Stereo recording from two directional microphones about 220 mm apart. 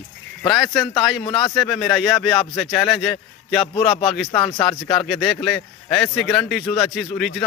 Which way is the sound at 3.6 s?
25° left (ahead or behind).